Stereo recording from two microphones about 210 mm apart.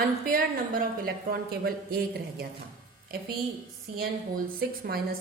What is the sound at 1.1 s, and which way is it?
A woman's voice, 45° right (ahead or behind).